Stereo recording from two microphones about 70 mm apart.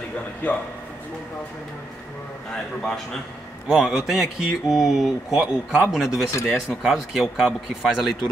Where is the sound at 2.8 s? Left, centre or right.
Centre.